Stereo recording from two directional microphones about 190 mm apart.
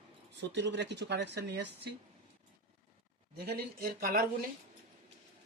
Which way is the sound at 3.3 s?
55° right (ahead or behind).